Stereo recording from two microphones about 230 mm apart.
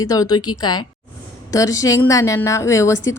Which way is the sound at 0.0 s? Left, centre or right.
Centre.